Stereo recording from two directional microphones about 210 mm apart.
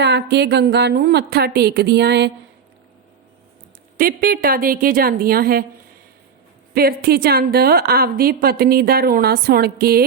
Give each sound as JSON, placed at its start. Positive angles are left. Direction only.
{"t": 0.0, "sound": "a woman's voice", "side_deg": -55}
{"t": 3.9, "sound": "a woman's voice", "side_deg": -45}
{"t": 6.7, "sound": "a woman's voice", "side_deg": -45}